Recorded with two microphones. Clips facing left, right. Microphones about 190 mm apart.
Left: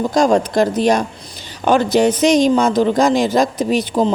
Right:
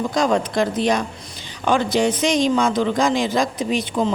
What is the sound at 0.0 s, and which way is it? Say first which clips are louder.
Speech: left 5 dB; 45° left (ahead or behind).